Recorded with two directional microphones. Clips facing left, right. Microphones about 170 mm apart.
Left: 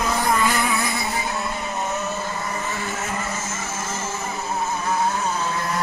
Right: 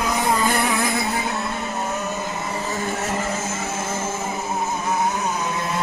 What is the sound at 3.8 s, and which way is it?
Music, 55° right (ahead or behind).